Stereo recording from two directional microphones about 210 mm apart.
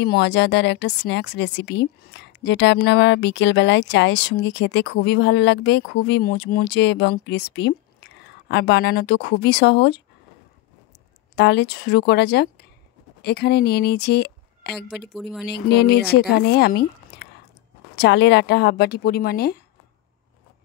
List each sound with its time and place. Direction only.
0.0 s speech: 55° left (ahead or behind)
11.3 s speech: 55° left (ahead or behind)
15.1 s speech: centre (ahead or behind)
15.4 s speech: 50° left (ahead or behind)